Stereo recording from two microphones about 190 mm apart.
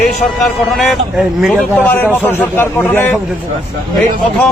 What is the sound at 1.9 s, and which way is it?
A man's voice, 10° left (ahead or behind).